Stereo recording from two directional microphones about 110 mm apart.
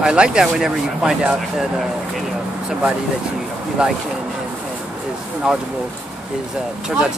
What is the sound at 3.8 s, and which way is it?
Speech, 10° right (ahead or behind).